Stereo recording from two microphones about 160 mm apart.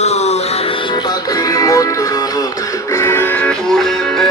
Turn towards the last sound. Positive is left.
turn(degrees=0)  # may be behind; listen again after turning